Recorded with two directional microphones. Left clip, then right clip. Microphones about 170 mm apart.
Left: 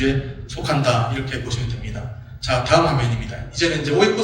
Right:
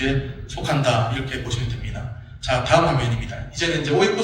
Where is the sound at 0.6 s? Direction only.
20° left (ahead or behind).